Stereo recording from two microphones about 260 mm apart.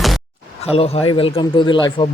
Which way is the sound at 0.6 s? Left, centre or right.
Left.